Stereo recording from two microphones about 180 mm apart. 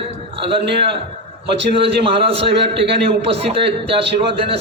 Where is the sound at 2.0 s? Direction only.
30° right (ahead or behind).